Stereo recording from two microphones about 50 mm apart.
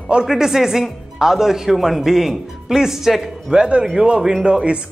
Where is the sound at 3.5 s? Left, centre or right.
Centre.